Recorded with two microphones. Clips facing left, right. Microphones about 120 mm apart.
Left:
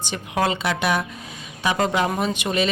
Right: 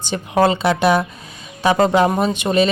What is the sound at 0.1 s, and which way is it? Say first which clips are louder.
Speech: right 7 dB; 35° right (ahead or behind).